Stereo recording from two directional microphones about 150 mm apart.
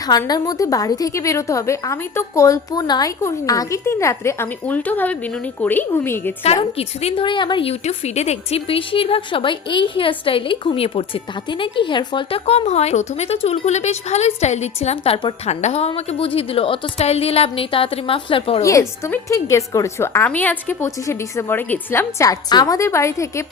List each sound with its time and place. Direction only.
0.0 s a woman's voice: 25° left (ahead or behind)
6.7 s a woman's voice: 40° left (ahead or behind)
15.4 s a woman's voice: 45° left (ahead or behind)
18.6 s a woman's voice: 20° left (ahead or behind)